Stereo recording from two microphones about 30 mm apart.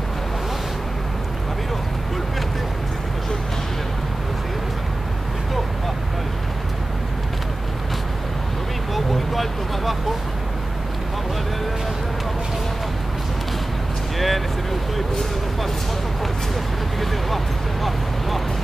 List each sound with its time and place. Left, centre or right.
8.9 s vehicle: centre
14.1 s vehicle: centre